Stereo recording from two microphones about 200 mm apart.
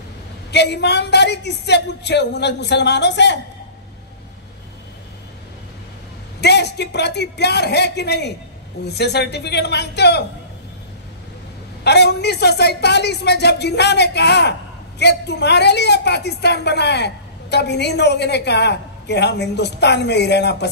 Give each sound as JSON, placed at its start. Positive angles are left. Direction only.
{"t": 0.5, "sound": "a woman's voice", "side_deg": 60}
{"t": 6.4, "sound": "a woman's voice", "side_deg": 55}
{"t": 11.8, "sound": "a woman's voice", "side_deg": 55}